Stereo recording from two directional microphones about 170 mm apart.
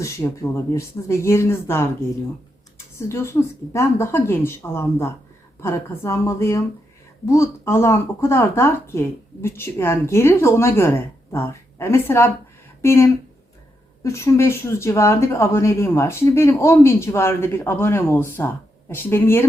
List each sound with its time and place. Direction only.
0.0 s speech: 15° left (ahead or behind)